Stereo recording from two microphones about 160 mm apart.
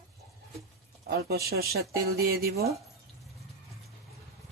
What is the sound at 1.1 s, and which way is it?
Speech, 80° right.